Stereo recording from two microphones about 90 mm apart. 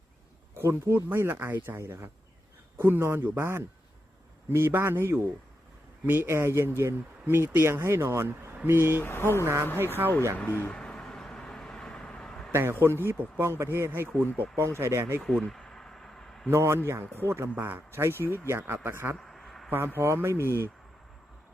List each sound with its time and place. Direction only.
0.5 s speech: 25° right (ahead or behind)
9.0 s speech: 30° left (ahead or behind)
9.7 s speech: 25° right (ahead or behind)
10.3 s speech: 25° left (ahead or behind)
10.7 s a sound: 10° left (ahead or behind)
12.5 s a man's voice: 30° right (ahead or behind)
15.2 s a sound: 5° left (ahead or behind)
16.5 s speech: 30° right (ahead or behind)
19.1 s a sound: 5° left (ahead or behind)
20.0 s speech: 30° right (ahead or behind)